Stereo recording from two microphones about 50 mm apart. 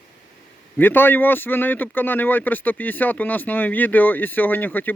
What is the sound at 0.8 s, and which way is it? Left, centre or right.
Speech, left.